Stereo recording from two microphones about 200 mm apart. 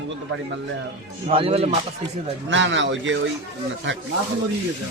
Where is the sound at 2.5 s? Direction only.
65° right (ahead or behind).